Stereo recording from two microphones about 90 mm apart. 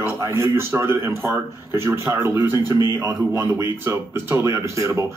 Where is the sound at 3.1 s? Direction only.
15° right (ahead or behind).